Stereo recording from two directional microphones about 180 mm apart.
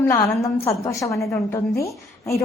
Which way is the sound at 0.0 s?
15° left (ahead or behind).